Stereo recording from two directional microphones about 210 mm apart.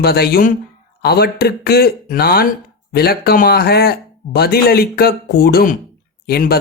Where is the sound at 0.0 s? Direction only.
50° left (ahead or behind).